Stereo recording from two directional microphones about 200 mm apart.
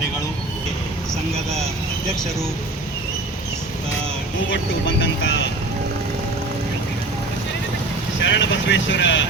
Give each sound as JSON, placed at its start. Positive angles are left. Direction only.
{"t": 4.5, "sound": "speech", "side_deg": 70}
{"t": 8.2, "sound": "speech", "side_deg": 65}